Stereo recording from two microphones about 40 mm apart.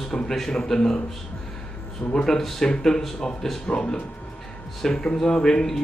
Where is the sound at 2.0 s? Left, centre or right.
Left.